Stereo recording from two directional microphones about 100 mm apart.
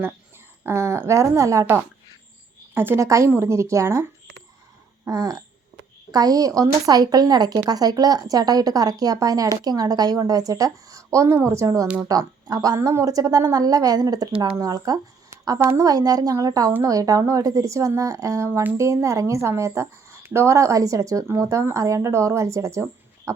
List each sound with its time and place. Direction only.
0.6 s a woman's voice: 25° right (ahead or behind)
2.7 s a woman's voice: 25° right (ahead or behind)
5.0 s a woman's voice: 35° right (ahead or behind)